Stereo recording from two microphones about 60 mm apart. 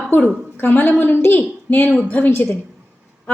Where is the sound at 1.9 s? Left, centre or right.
Left.